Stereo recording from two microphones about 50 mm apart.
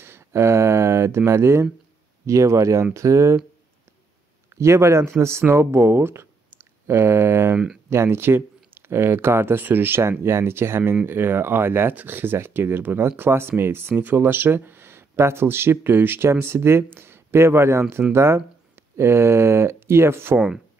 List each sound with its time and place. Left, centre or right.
0.0 s a sound: right
2.2 s speech: right
4.6 s speech: right
7.5 s speech: centre
7.9 s speech: right